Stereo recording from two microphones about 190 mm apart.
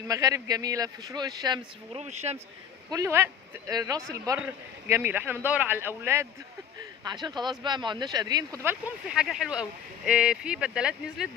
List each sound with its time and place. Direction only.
0.1 s speech: 15° right (ahead or behind)
2.0 s speech: 35° right (ahead or behind)
2.9 s speech: 15° right (ahead or behind)
7.0 s speech: 20° right (ahead or behind)
9.0 s speech: centre (ahead or behind)